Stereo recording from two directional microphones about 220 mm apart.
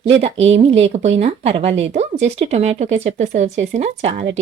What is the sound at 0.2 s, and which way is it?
Speech, 30° right (ahead or behind).